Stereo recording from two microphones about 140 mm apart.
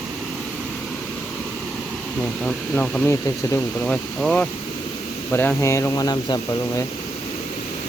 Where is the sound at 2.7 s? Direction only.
10° left (ahead or behind); by 6.8 s 30° left (ahead or behind).